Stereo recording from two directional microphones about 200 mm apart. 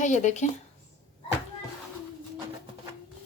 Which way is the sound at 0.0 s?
35° left (ahead or behind).